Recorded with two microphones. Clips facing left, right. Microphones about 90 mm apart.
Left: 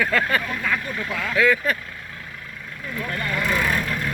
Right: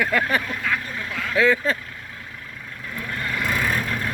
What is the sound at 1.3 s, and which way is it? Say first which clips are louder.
Speech: right 1 dB; 30° right (ahead or behind).